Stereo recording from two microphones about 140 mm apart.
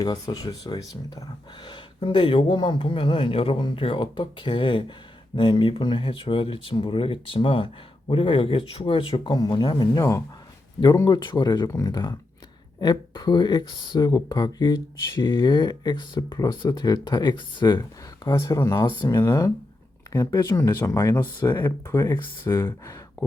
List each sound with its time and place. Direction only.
0.0 s speech: 30° left (ahead or behind)